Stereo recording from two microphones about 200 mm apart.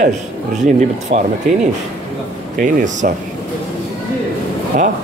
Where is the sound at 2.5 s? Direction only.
40° right (ahead or behind).